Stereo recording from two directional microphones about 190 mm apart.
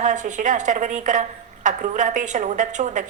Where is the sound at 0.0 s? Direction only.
40° right (ahead or behind).